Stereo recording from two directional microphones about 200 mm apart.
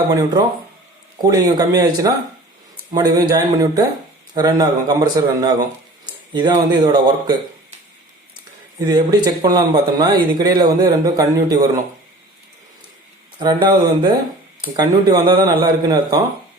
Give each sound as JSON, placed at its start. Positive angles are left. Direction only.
{"t": 0.1, "sound": "speech", "side_deg": -15}
{"t": 8.8, "sound": "speech", "side_deg": -20}
{"t": 13.4, "sound": "speech", "side_deg": -20}